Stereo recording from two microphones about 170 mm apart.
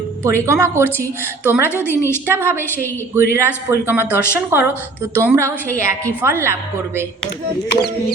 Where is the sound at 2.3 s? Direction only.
15° right (ahead or behind).